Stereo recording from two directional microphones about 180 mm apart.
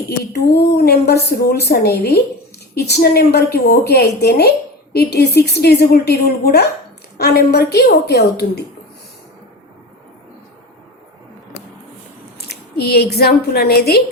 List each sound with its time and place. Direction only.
0.2 s a woman's voice: 60° left (ahead or behind)
12.5 s a woman's voice: 60° left (ahead or behind)